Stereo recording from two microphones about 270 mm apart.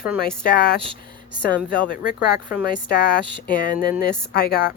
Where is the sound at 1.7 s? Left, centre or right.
Left.